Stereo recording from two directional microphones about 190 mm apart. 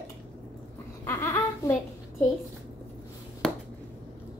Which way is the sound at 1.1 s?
10° left (ahead or behind).